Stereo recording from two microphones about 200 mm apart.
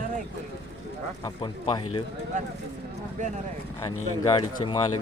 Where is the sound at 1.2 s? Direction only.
25° left (ahead or behind).